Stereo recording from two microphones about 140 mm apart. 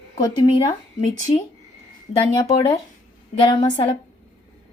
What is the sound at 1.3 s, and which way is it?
Speech, 45° left (ahead or behind).